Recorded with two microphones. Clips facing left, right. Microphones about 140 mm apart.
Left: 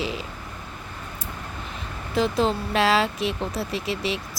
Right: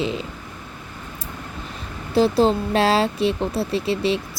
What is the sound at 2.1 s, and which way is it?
Speech, 35° right (ahead or behind).